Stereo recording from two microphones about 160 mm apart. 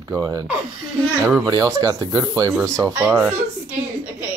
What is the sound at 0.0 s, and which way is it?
Speech, 25° right (ahead or behind).